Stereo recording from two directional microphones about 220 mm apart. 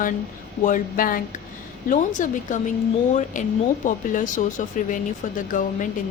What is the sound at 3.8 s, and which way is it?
Speech, 35° left (ahead or behind).